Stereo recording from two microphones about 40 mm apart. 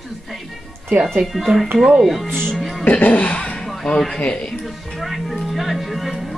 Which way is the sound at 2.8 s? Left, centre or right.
Left.